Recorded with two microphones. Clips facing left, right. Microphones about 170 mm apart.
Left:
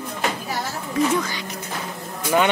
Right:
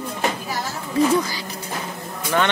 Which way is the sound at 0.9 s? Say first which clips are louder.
Right 3 dB; 35° right (ahead or behind).